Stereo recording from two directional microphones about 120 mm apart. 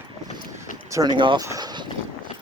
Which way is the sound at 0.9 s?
35° right (ahead or behind).